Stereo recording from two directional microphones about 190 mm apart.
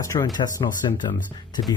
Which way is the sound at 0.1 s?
20° left (ahead or behind).